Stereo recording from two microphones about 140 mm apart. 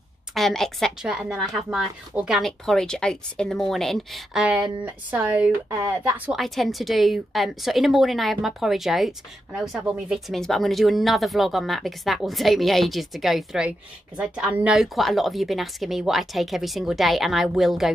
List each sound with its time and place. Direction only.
0.3 s a woman's voice: centre (ahead or behind)
6.4 s a woman's voice: centre (ahead or behind)